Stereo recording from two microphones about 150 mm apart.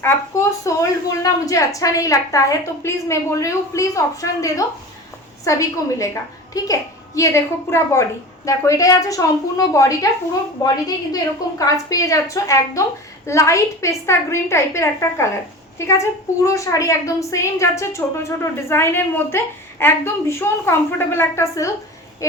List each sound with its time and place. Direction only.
0.0 s a woman's voice: 20° left (ahead or behind)